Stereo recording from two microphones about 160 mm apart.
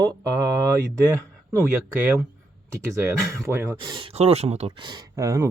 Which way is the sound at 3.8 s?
30° right (ahead or behind).